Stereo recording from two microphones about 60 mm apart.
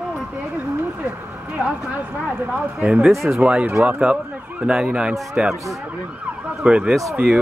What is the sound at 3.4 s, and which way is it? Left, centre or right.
Speech, right.